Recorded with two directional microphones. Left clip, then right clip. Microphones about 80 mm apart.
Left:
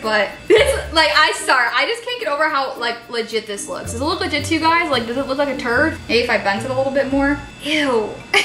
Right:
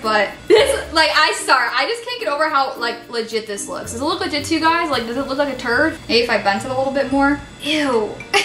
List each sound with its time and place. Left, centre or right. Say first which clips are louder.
0.0 s a woman's voice: right 1 dB; centre
3.3 s a woman's voice: even; centre
4.2 s a woman's voice: even; centre